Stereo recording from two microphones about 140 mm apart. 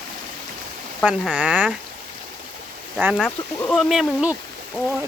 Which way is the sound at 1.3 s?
10° right (ahead or behind).